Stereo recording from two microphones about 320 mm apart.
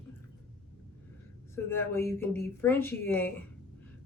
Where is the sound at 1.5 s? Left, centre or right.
Centre.